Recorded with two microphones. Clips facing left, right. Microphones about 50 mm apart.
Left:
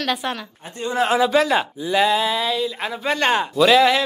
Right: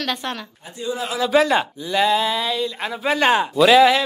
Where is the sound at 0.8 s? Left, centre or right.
Left.